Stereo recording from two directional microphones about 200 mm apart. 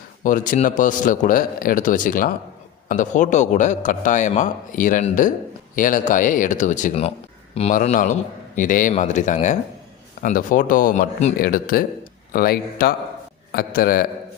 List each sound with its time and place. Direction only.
0.2 s a man's voice: 40° left (ahead or behind)